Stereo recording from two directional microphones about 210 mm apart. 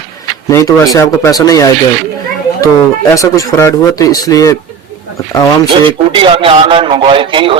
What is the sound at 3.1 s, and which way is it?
Speech, 15° left (ahead or behind).